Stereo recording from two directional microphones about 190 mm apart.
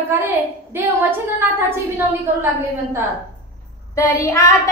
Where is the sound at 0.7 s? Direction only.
10° right (ahead or behind).